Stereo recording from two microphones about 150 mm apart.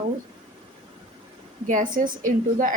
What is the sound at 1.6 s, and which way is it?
A woman's voice, 60° right (ahead or behind).